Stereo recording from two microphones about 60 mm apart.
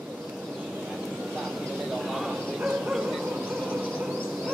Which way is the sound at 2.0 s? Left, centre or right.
Centre.